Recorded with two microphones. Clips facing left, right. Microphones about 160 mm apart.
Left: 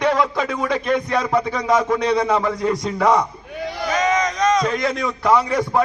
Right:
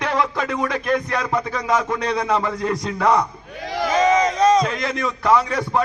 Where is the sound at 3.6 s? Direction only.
90° right.